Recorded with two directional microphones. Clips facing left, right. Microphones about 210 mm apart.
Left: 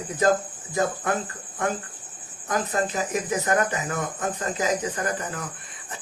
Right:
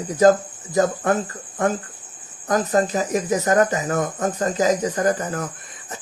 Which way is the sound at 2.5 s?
40° right (ahead or behind).